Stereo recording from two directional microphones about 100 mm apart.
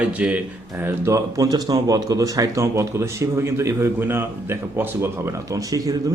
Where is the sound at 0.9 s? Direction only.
30° right (ahead or behind).